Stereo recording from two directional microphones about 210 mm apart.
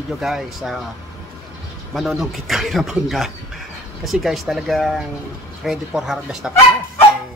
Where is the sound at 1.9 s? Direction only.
Centre (ahead or behind).